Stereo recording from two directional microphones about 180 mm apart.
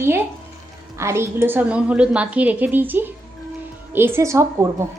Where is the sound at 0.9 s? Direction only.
15° right (ahead or behind).